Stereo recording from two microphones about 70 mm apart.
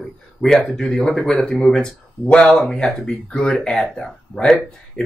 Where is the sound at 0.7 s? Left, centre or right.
Centre.